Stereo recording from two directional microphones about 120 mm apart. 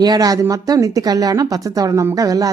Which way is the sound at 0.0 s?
35° right (ahead or behind).